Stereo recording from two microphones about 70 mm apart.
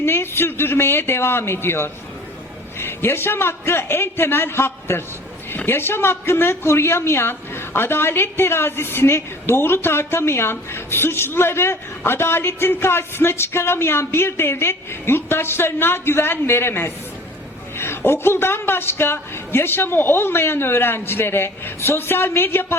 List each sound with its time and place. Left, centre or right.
0.0 s speech: left